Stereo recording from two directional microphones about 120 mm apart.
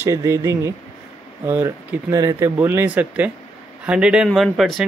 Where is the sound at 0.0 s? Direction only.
25° right (ahead or behind).